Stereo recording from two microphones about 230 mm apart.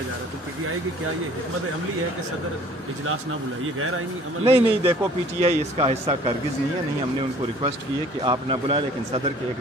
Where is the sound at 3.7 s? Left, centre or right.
Right.